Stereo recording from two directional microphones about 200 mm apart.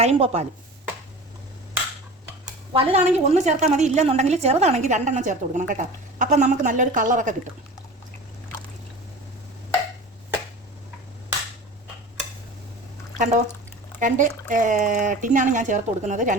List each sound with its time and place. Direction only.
0.0 s a woman's voice: 30° right (ahead or behind)
2.7 s a woman's voice: 30° right (ahead or behind)
13.1 s a woman's voice: 40° right (ahead or behind)